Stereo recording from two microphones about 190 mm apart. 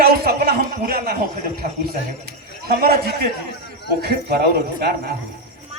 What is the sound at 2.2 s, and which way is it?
A man's voice, 55° right (ahead or behind).